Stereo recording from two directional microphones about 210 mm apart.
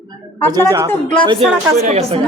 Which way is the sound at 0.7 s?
15° right (ahead or behind).